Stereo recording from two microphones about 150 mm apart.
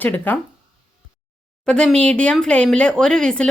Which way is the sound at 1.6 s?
5° left (ahead or behind).